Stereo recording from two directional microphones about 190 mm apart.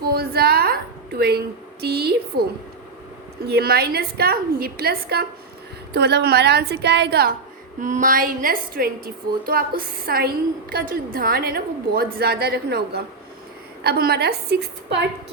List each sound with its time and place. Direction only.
0.0 s a sound: 55° right (ahead or behind)
1.8 s a woman's voice: 60° right (ahead or behind)
3.5 s a woman's voice: 55° right (ahead or behind)
7.8 s a woman's voice: 40° right (ahead or behind); by 15.0 s 60° right (ahead or behind)